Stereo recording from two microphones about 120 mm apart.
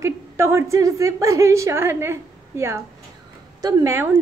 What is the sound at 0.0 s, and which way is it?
A woman's voice, 20° right (ahead or behind).